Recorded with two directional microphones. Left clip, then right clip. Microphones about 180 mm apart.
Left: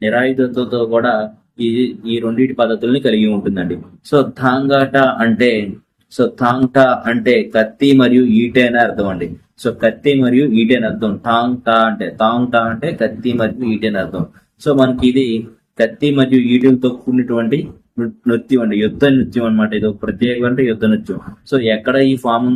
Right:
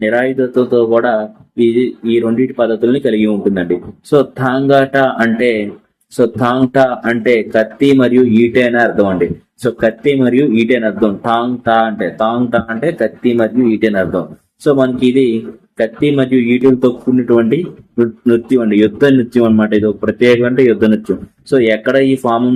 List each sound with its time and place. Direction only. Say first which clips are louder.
0.0 s speech: right 1 dB; 15° right (ahead or behind)